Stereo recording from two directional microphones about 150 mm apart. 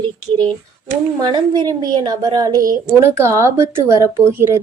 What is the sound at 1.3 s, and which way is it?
A woman's voice, 30° right (ahead or behind).